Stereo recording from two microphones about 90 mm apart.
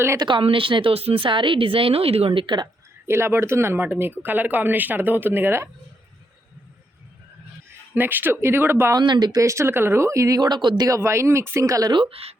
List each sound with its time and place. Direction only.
0.2 s a woman's voice: 65° right (ahead or behind)
3.1 s speech: 30° right (ahead or behind)
7.9 s speech: 20° right (ahead or behind)
9.0 s speech: 50° right (ahead or behind)
9.4 s a woman's voice: 35° right (ahead or behind); by 10.8 s 55° right (ahead or behind)
10.8 s a woman's voice: 35° right (ahead or behind)
11.9 s speech: 75° right (ahead or behind)